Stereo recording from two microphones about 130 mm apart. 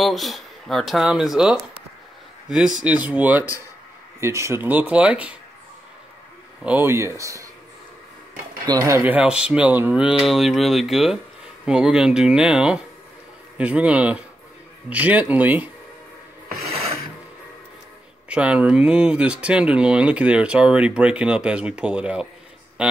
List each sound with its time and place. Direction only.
0.0 s speech: centre (ahead or behind)
6.6 s speech: 15° right (ahead or behind)
8.6 s speech: 25° right (ahead or behind)
9.4 s speech: 10° right (ahead or behind)
18.3 s speech: 10° right (ahead or behind)